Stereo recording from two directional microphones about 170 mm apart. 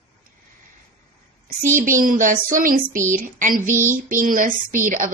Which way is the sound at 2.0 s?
50° right (ahead or behind).